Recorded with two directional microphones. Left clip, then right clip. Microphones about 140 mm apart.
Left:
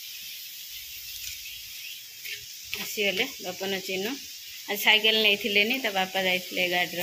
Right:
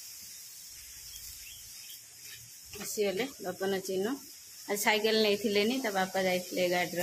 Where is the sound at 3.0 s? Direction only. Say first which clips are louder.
Left 5 dB; centre (ahead or behind).